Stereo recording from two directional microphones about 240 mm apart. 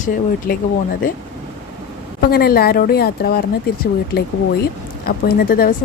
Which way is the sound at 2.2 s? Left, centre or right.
Left.